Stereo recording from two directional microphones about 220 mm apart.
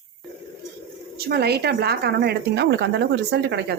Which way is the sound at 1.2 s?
45° right (ahead or behind).